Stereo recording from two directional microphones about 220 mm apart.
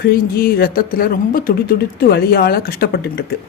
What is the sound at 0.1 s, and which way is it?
Speech, 45° left (ahead or behind).